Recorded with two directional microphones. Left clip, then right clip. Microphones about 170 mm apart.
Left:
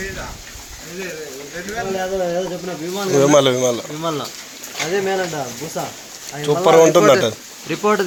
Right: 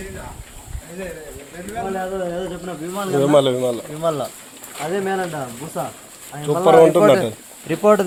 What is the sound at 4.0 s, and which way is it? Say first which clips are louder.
Speech: right 2 dB; 55° right (ahead or behind).